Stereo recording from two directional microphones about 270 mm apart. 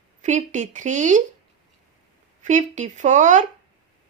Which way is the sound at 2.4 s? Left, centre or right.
Right.